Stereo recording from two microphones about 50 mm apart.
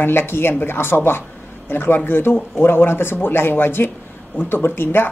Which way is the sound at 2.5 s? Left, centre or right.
Left.